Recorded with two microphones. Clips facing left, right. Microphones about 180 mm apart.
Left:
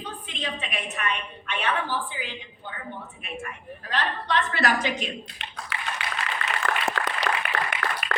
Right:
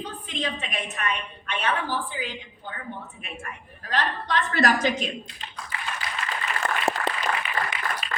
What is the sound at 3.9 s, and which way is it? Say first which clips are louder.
A woman's voice: even; 45° right (ahead or behind).